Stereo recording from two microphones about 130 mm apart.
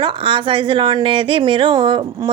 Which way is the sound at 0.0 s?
40° right (ahead or behind).